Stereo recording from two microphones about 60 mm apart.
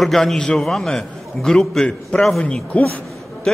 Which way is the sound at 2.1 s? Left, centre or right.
Centre.